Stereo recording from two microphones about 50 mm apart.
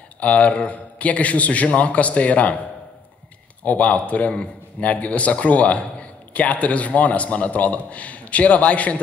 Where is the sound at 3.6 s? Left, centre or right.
Left.